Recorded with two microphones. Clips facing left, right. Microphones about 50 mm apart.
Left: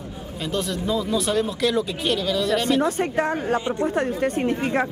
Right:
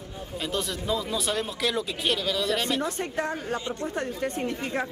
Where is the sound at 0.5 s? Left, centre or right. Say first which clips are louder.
Left 5 dB; centre.